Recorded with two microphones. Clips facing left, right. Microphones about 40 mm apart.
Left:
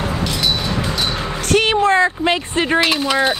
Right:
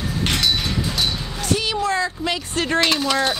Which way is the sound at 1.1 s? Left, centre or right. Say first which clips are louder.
Left 6 dB; left.